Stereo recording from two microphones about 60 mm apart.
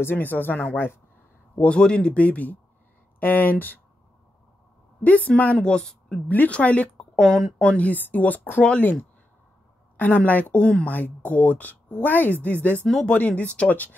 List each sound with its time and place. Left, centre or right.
0.0 s speech: left
1.6 s speech: centre
5.0 s speech: left
5.6 s a woman's voice: centre
6.2 s speech: left
7.2 s speech: centre
7.6 s speech: left
9.9 s speech: left